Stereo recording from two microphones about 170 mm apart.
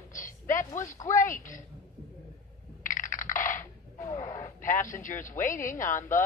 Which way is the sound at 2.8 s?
50° left (ahead or behind).